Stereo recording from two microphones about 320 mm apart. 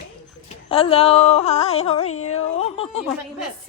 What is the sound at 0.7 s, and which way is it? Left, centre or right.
A woman's voice, centre.